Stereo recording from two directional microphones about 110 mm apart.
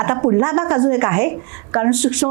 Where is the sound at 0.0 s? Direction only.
25° right (ahead or behind).